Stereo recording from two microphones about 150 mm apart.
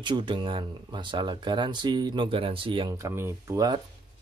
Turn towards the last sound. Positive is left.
turn(degrees=-25)  # may be behind; listen again after turning